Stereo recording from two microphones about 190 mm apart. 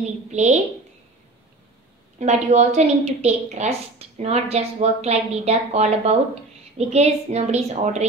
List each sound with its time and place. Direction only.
0.3 s a woman's voice: 35° right (ahead or behind)
2.1 s a woman's voice: 35° right (ahead or behind)